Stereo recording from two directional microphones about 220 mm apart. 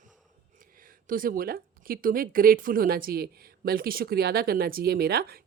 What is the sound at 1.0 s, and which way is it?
A woman's voice, 40° right (ahead or behind).